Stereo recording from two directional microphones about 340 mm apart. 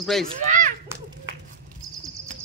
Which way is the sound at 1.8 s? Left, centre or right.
Centre.